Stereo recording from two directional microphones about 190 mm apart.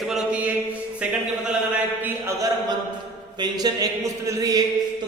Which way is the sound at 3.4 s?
20° right (ahead or behind).